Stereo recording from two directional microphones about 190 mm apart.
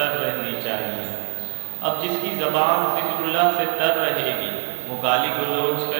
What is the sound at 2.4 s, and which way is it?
A man's voice, 20° right (ahead or behind).